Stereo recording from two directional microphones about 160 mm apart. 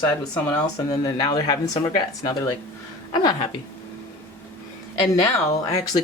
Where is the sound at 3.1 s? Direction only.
25° left (ahead or behind).